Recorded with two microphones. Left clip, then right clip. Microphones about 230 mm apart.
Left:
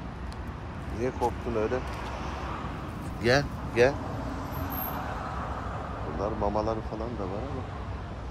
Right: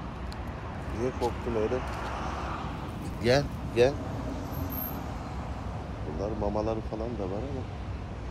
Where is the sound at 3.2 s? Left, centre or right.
Centre.